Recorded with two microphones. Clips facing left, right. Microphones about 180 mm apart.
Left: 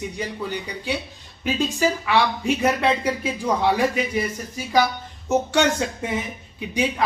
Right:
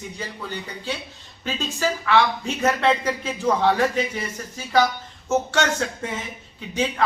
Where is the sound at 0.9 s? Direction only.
15° left (ahead or behind).